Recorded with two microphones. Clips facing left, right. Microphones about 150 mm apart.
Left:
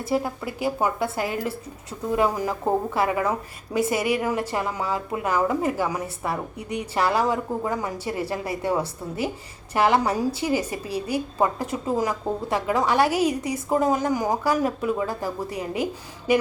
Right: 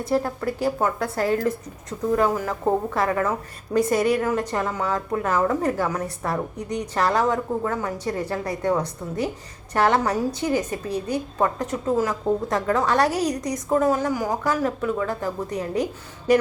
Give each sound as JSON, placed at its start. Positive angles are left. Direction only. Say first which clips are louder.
{"t": 0.0, "sound": "a woman's voice", "louder": "right 2 dB", "side_deg": 5}